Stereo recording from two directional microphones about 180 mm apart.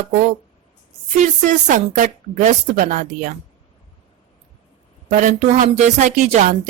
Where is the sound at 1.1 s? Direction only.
40° right (ahead or behind).